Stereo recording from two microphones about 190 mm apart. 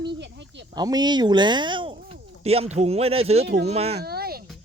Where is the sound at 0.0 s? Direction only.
65° right (ahead or behind).